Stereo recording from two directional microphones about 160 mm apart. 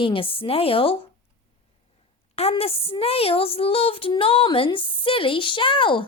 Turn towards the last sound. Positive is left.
turn(degrees=30)  # may be behind; listen again after turning